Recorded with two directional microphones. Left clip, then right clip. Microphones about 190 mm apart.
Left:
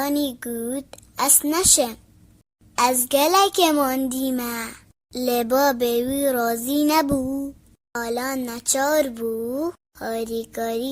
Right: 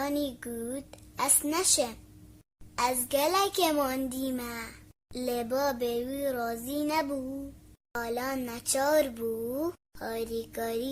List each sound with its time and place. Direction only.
0.0 s speech: 25° left (ahead or behind)
4.3 s a sound: 30° left (ahead or behind)
7.9 s speech: 25° left (ahead or behind)